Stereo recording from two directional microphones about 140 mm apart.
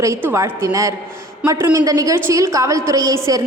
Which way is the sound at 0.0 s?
20° right (ahead or behind).